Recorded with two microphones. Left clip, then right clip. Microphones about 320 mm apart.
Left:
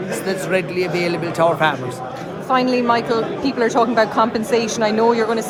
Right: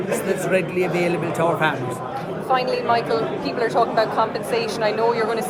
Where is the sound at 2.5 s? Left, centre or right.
Left.